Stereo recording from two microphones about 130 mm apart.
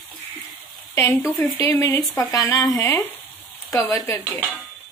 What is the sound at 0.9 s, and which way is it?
Speech, 20° left (ahead or behind).